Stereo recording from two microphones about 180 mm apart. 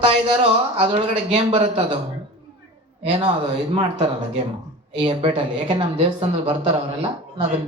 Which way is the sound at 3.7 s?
35° right (ahead or behind).